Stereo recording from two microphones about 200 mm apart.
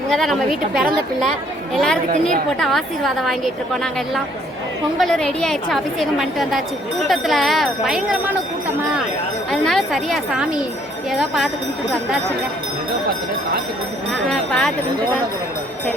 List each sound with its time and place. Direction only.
0.1 s a woman's voice: centre (ahead or behind)
4.9 s a woman's voice: 5° left (ahead or behind)
9.5 s a woman's voice: centre (ahead or behind)
14.1 s a woman's voice: centre (ahead or behind)